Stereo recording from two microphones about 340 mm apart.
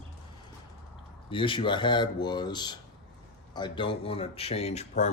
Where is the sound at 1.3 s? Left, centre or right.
Centre.